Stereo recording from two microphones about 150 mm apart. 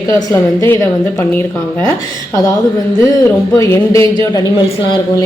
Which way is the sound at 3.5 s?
20° left (ahead or behind).